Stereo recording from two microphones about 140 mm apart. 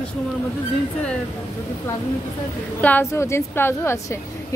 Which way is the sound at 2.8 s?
15° left (ahead or behind).